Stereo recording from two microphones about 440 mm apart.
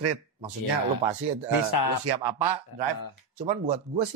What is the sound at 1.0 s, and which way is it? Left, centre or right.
Speech, centre.